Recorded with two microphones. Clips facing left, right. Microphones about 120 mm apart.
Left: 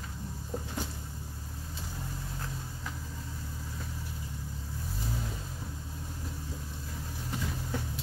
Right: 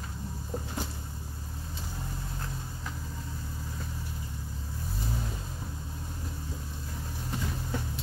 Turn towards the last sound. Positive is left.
turn(degrees=0)  # may be behind; listen again after turning